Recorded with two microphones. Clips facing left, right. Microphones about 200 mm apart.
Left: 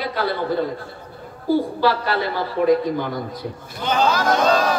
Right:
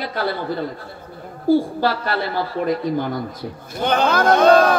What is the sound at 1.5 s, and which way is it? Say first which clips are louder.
A woman's voice: right 2 dB; 50° right (ahead or behind).